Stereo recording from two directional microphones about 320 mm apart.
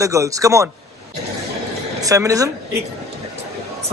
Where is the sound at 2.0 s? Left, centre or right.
Centre.